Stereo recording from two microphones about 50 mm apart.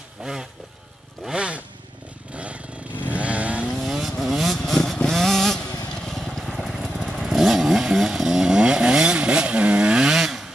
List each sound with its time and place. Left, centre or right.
0.2 s vehicle: centre
1.3 s motorcycle: right
3.1 s chainsaw: right
3.8 s vehicle: centre
6.8 s motorcycle: centre
7.2 s chainsaw: centre
10.0 s vehicle: centre